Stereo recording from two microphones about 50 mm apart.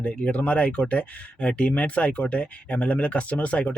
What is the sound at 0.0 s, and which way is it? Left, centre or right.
Speech, left.